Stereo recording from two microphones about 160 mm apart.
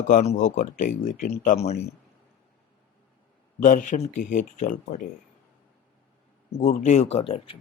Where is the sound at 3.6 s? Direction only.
50° left (ahead or behind).